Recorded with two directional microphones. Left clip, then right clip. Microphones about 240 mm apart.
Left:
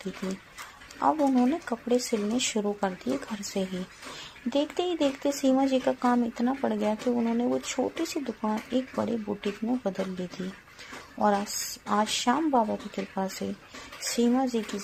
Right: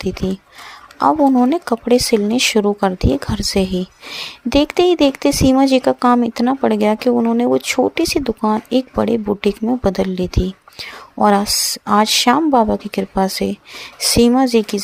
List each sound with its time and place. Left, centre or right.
0.2 s speech: right